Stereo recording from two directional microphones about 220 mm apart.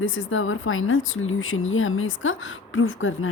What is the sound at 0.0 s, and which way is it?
Speech, 65° left (ahead or behind).